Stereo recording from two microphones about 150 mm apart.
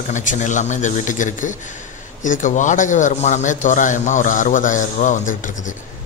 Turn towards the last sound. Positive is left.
turn(degrees=60)  # may be behind; listen again after turning